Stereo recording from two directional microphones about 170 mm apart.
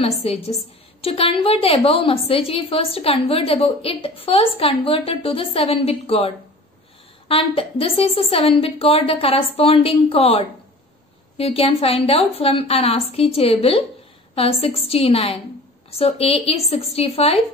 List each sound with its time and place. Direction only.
0.0 s a woman's voice: 35° left (ahead or behind)